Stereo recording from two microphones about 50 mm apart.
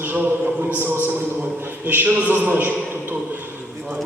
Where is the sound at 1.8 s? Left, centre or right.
Right.